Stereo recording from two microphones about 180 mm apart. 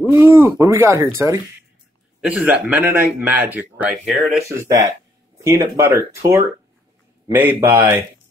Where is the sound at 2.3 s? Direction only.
10° right (ahead or behind).